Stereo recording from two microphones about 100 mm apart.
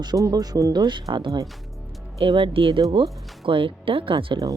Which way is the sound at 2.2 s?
65° right (ahead or behind).